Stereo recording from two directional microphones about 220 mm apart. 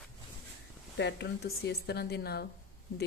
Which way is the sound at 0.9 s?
50° left (ahead or behind).